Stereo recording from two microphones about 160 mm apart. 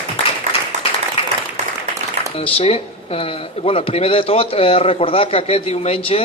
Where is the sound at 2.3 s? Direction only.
40° left (ahead or behind).